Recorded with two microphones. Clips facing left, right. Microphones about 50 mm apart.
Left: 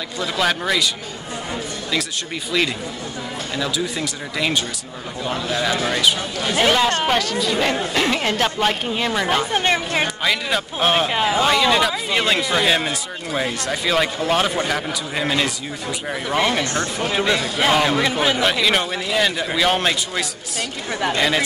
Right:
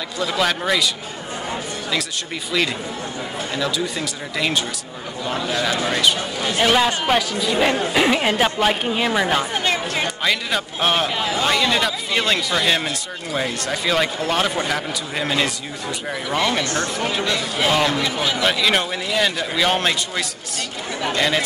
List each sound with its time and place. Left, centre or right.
0.2 s speech: centre
3.5 s speech: centre
9.5 s speech: left
10.0 s speech: centre
11.1 s speech: left
11.4 s speech: centre
16.1 s speech: centre
16.6 s speech: left
18.4 s speech: centre